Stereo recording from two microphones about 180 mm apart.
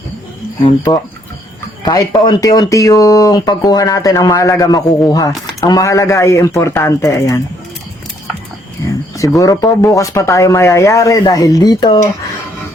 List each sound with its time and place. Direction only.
1.8 s speech: 20° left (ahead or behind)
8.8 s speech: 20° left (ahead or behind)